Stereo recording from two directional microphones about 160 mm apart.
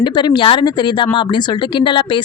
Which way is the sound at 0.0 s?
30° left (ahead or behind).